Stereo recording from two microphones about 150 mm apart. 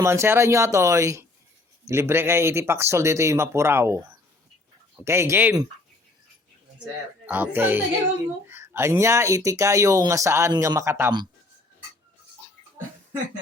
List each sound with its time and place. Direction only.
0.0 s speech: 15° right (ahead or behind)
7.3 s speech: 10° right (ahead or behind)